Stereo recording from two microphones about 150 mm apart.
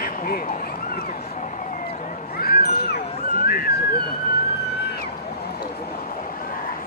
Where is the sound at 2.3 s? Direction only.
90° left.